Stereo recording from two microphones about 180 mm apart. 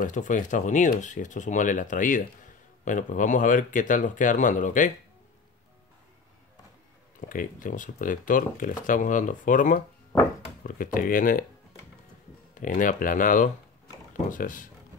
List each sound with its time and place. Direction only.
0.0 s speech: 45° left (ahead or behind)
7.2 s speech: 50° left (ahead or behind)
12.5 s speech: 45° left (ahead or behind)